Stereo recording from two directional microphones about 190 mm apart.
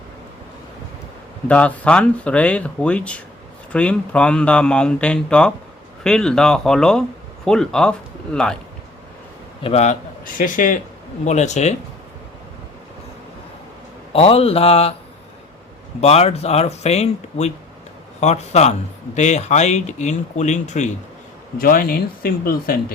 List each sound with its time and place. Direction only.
1.5 s speech: 5° left (ahead or behind)
9.6 s speech: 35° left (ahead or behind)
14.1 s speech: 30° left (ahead or behind)
16.0 s speech: 35° left (ahead or behind)
21.6 s speech: 50° left (ahead or behind)